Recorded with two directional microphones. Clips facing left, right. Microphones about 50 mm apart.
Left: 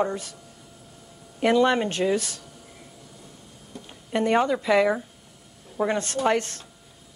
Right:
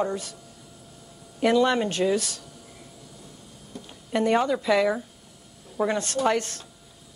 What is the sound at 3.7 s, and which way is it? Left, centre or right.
Speech, left.